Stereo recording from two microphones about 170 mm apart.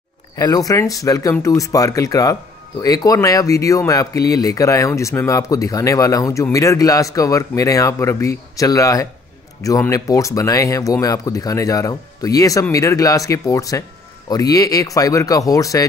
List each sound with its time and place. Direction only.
0.4 s speech: 20° left (ahead or behind)